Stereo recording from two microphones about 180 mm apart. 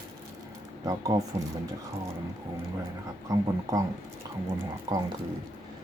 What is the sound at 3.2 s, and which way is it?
Speech, 20° right (ahead or behind).